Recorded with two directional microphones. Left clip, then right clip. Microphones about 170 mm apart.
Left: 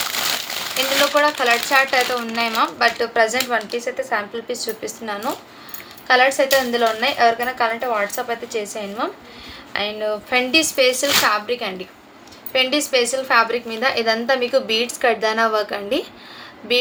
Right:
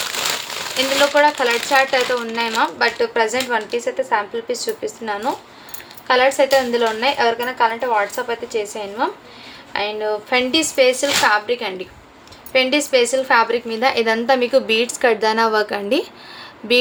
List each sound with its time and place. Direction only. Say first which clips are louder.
1.1 s a woman's voice: right 1 dB; 10° right (ahead or behind)